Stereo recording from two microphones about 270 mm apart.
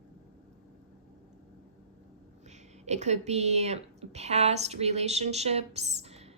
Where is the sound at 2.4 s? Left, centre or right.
Right.